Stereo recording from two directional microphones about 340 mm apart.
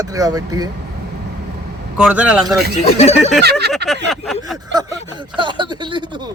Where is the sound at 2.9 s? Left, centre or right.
Centre.